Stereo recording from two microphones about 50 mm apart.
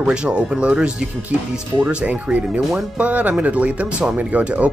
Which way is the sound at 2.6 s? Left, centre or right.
Centre.